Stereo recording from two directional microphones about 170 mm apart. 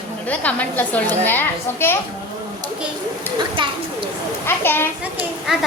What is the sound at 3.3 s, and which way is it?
Speech, 30° right (ahead or behind).